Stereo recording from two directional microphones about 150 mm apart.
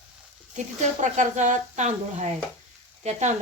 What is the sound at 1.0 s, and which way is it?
Speech, 55° right (ahead or behind).